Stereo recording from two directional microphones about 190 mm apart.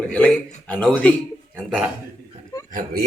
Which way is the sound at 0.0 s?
5° left (ahead or behind).